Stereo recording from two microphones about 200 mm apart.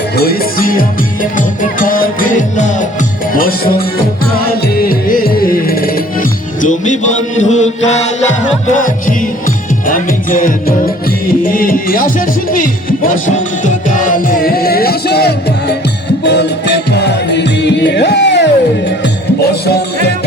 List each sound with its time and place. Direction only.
0.2 s music: 45° left (ahead or behind)